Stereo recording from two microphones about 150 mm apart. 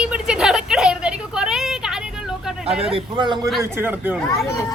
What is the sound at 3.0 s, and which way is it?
Speech, 30° right (ahead or behind).